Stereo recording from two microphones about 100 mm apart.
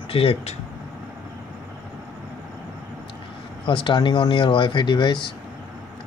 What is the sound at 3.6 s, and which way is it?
Speech, 55° left (ahead or behind).